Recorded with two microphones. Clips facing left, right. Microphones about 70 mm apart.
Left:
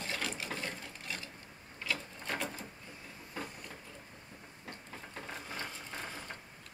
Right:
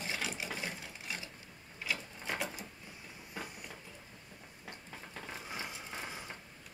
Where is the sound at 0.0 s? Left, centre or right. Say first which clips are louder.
Even; centre.